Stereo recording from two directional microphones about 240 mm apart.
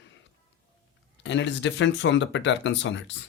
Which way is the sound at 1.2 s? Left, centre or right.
Left.